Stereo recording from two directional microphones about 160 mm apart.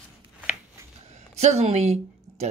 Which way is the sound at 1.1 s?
45° right (ahead or behind).